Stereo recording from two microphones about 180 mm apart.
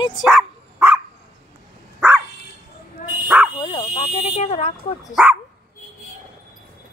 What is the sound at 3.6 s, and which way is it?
Fire alarm, 35° left (ahead or behind).